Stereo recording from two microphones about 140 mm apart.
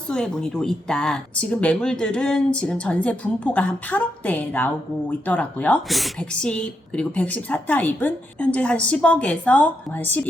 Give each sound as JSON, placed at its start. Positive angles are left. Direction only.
{"t": 0.1, "sound": "speech", "side_deg": 5}
{"t": 5.9, "sound": "speech", "side_deg": 0}